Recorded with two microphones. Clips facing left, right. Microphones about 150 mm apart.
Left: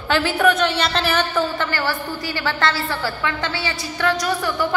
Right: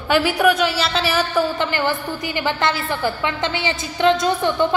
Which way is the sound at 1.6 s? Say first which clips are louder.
Right 2 dB; 20° right (ahead or behind).